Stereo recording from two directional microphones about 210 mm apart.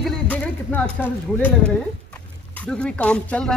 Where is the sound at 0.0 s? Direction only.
5° left (ahead or behind).